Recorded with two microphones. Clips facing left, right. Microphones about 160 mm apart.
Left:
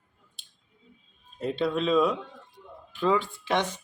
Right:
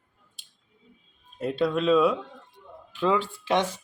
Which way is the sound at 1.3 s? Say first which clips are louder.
Right 2 dB; 5° right (ahead or behind).